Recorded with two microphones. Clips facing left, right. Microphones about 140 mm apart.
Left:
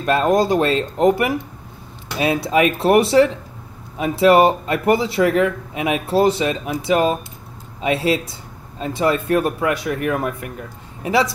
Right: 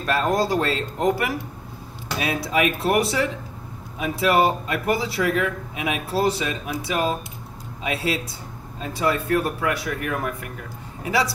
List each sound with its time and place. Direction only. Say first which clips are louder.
0.0 s speech: left 5 dB; 20° left (ahead or behind)